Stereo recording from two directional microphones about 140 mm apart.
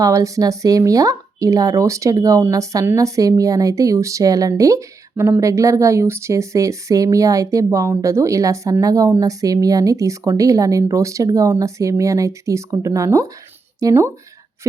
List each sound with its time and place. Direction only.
0.0 s speech: 25° right (ahead or behind)